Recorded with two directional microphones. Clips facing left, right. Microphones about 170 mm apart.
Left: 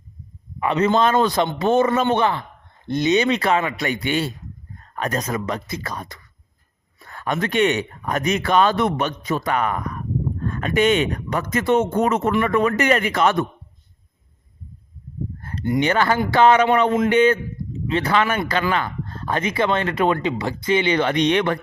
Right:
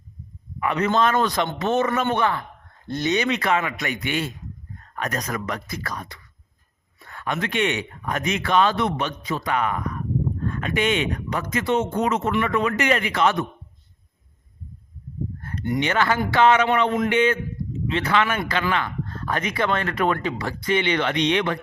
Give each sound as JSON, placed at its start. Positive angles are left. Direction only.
{"t": 0.6, "sound": "a man's voice", "side_deg": 25}
{"t": 3.2, "sound": "a man's voice", "side_deg": 30}
{"t": 7.0, "sound": "speech", "side_deg": 40}
{"t": 15.4, "sound": "a man's voice", "side_deg": 30}
{"t": 20.8, "sound": "speech", "side_deg": 35}